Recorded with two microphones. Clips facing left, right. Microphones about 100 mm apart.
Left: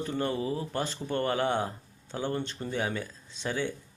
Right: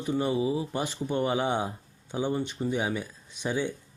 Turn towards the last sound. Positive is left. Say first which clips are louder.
# right 2 dB
turn(degrees=-15)  # may be behind; listen again after turning